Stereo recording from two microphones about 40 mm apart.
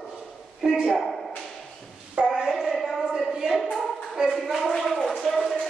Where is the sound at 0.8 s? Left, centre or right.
Centre.